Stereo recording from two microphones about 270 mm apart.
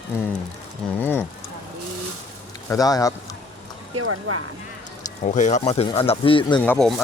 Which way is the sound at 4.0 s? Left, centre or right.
Right.